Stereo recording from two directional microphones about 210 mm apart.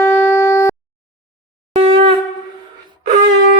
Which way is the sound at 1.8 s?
25° right (ahead or behind).